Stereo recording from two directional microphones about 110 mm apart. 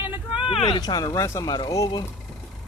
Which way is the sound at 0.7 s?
35° left (ahead or behind).